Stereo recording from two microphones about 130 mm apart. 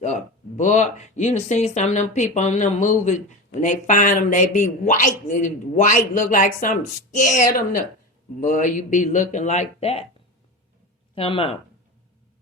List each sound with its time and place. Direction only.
0.0 s a woman's voice: 65° left (ahead or behind); by 7.8 s 90° left
8.4 s speech: 75° left (ahead or behind); by 10.0 s 55° left (ahead or behind)
11.1 s speech: 45° left (ahead or behind)